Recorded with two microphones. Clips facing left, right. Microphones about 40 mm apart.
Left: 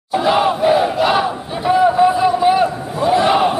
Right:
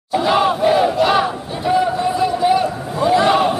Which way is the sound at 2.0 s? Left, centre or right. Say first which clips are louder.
Left 4 dB; centre.